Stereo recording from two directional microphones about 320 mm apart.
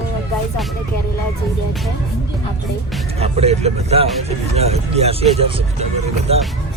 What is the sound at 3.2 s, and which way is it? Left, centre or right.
Speech, centre.